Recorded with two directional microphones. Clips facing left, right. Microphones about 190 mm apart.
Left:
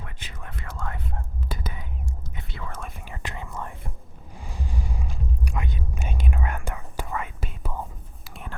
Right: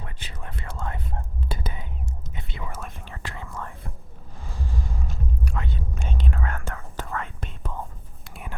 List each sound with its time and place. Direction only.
0.0 s whispering: 35° right (ahead or behind); by 2.8 s 15° right (ahead or behind)
3.0 s whispering: 15° left (ahead or behind)